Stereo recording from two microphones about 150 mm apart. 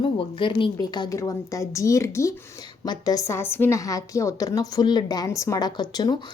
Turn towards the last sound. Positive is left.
turn(degrees=25)  # may be behind; listen again after turning